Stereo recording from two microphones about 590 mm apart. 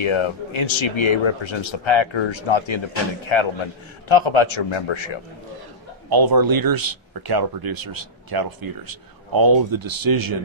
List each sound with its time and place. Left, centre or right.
0.0 s speech: left
6.0 s speech: right